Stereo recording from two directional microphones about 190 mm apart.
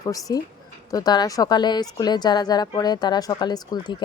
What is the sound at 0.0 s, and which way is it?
A woman's voice, 20° left (ahead or behind).